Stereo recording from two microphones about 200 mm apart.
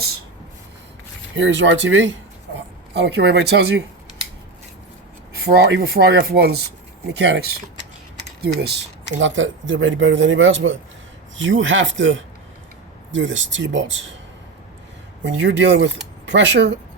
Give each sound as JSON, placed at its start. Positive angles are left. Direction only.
{"t": 1.4, "sound": "speech", "side_deg": -70}
{"t": 2.6, "sound": "speech", "side_deg": -60}
{"t": 5.3, "sound": "speech", "side_deg": -50}
{"t": 15.2, "sound": "speech", "side_deg": -65}